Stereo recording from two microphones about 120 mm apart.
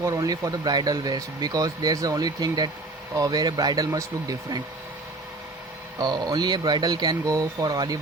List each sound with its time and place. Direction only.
0.0 s speech: 25° right (ahead or behind)
6.0 s speech: 35° right (ahead or behind)